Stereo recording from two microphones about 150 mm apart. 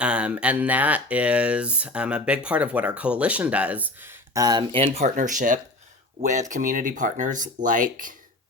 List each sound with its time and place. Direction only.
0.0 s speech: 5° right (ahead or behind)
4.4 s speech: 30° right (ahead or behind)
5.0 s speech: 55° right (ahead or behind)